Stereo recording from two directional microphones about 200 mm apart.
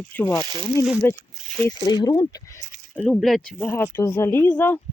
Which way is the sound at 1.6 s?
15° left (ahead or behind).